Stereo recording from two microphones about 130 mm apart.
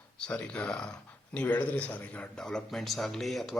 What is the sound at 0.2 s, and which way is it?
A man's voice, 10° left (ahead or behind).